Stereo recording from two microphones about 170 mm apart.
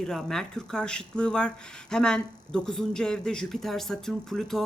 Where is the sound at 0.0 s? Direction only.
5° left (ahead or behind).